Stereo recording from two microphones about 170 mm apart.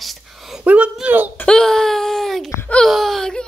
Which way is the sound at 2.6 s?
5° left (ahead or behind).